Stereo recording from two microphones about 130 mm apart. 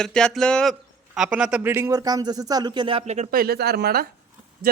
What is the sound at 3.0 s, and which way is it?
Speech, 60° right (ahead or behind).